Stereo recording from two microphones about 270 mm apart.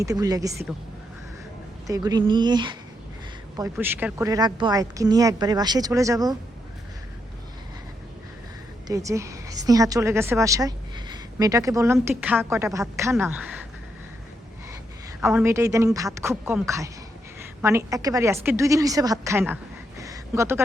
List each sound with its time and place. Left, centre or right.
0.0 s a woman's voice: centre
1.9 s a woman's voice: centre
8.9 s a woman's voice: centre
15.2 s a woman's voice: centre
20.0 s a sound: centre